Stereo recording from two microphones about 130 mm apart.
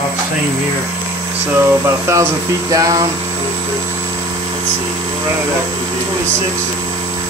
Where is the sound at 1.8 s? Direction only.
20° right (ahead or behind).